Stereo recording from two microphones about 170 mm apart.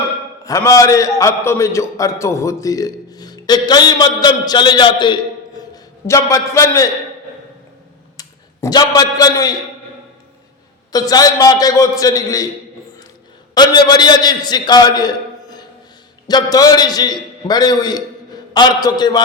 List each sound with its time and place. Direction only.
0.4 s a man's voice: 20° left (ahead or behind)
8.1 s a man's voice: 20° left (ahead or behind)
10.9 s a man's voice: 20° left (ahead or behind)
13.5 s a man's voice: 25° left (ahead or behind)